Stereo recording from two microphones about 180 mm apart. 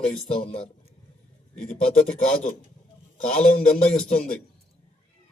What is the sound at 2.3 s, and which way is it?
Speech, 45° left (ahead or behind).